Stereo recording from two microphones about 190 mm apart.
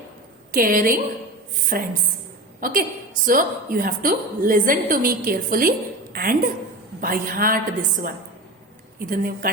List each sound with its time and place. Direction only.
0.5 s a woman's voice: 50° right (ahead or behind)